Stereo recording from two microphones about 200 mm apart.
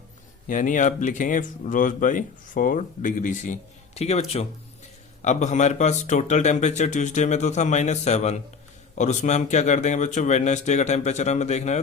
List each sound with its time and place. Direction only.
0.4 s speech: 40° left (ahead or behind)